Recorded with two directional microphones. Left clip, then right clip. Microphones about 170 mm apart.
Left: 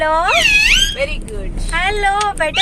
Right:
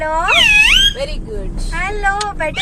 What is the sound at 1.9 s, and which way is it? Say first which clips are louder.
Speech: left 2 dB; 25° left (ahead or behind).